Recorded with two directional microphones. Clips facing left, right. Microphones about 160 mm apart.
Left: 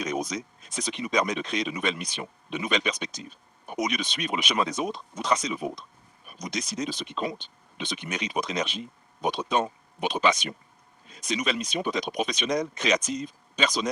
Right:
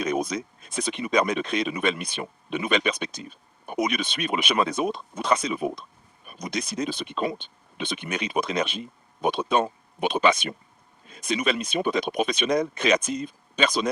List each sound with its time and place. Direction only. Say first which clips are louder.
0.0 s speech: right 4 dB; 55° right (ahead or behind)